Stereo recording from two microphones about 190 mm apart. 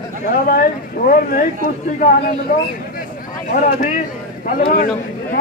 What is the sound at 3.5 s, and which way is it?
Speech, 45° left (ahead or behind).